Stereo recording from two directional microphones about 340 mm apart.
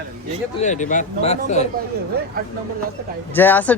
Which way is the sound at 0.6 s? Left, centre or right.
Left.